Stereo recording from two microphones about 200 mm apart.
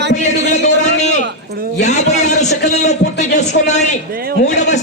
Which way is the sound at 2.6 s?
35° left (ahead or behind).